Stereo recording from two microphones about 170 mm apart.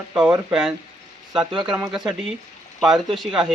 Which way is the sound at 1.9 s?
Centre (ahead or behind).